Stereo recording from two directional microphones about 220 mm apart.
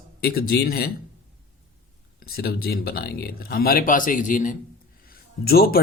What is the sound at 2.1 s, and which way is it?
Speech, 45° left (ahead or behind).